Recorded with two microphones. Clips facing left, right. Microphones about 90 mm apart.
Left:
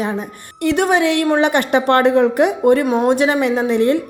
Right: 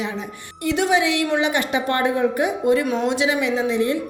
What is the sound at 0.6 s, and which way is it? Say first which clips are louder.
A woman's voice: left 4 dB; 55° left (ahead or behind).